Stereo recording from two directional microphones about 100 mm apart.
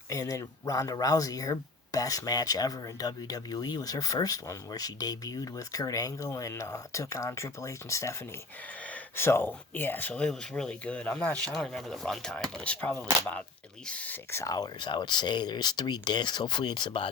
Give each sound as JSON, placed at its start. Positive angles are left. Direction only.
{"t": 0.1, "sound": "speech", "side_deg": 35}
{"t": 14.3, "sound": "speech", "side_deg": 30}